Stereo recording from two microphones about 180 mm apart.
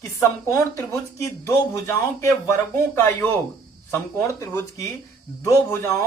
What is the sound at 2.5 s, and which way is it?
Speech, 10° left (ahead or behind).